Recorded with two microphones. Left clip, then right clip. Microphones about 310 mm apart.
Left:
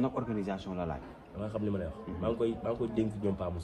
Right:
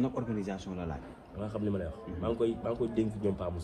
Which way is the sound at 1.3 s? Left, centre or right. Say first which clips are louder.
Even; centre.